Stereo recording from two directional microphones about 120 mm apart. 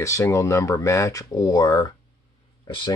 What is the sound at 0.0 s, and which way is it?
Speech, 25° left (ahead or behind).